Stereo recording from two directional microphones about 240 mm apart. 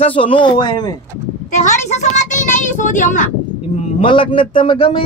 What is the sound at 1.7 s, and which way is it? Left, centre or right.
A woman's voice, left.